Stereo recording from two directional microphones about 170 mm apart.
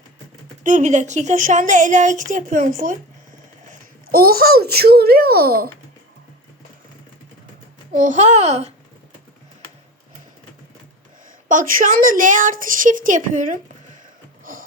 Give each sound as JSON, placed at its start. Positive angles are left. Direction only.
{"t": 0.6, "sound": "a woman's voice", "side_deg": -45}
{"t": 3.7, "sound": "a child's voice", "side_deg": -60}
{"t": 7.9, "sound": "a child's voice", "side_deg": -45}
{"t": 11.4, "sound": "a woman's voice", "side_deg": -50}
{"t": 14.5, "sound": "music", "side_deg": -55}